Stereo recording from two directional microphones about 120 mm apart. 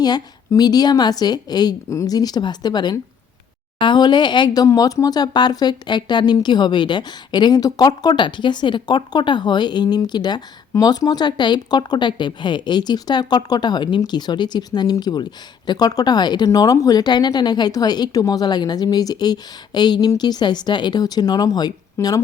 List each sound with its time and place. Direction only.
0.0 s speech: 35° left (ahead or behind)